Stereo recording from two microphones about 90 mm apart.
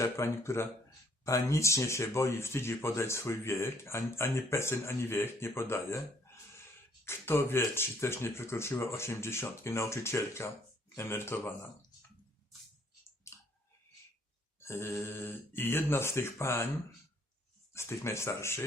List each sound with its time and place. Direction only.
0.0 s speech: 30° left (ahead or behind)
14.6 s speech: 30° left (ahead or behind)
17.7 s speech: 30° left (ahead or behind)